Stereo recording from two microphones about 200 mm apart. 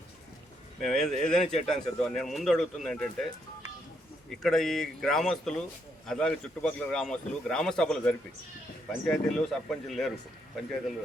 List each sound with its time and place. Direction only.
0.8 s a man's voice: centre (ahead or behind)
4.3 s a man's voice: centre (ahead or behind)